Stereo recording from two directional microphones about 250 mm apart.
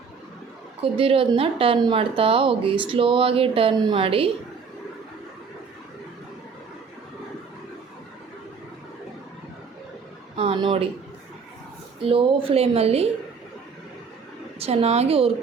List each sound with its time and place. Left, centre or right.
0.8 s speech: right
10.3 s a sound: right
12.0 s speech: right
14.6 s speech: right